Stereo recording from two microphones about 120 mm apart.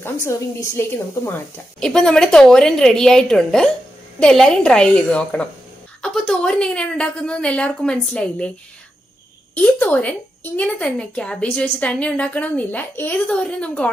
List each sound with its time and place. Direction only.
0.0 s a woman's voice: 25° left (ahead or behind)
1.8 s a woman's voice: 5° left (ahead or behind)
9.6 s a woman's voice: 10° left (ahead or behind)